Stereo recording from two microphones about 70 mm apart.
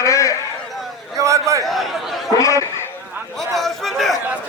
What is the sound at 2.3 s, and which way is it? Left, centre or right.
Speech, left.